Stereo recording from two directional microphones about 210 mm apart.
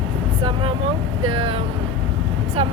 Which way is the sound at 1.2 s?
25° right (ahead or behind).